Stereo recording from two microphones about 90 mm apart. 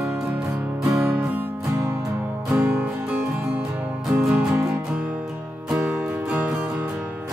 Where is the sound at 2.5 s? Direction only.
20° right (ahead or behind).